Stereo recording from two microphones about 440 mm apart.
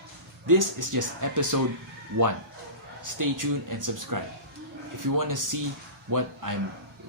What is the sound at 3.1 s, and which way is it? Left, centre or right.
Speech, right.